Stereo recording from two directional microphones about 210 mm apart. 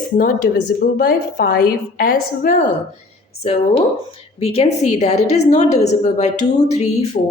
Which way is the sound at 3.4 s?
30° left (ahead or behind).